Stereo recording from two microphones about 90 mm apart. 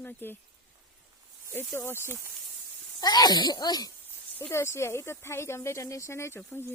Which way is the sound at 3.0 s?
45° left (ahead or behind).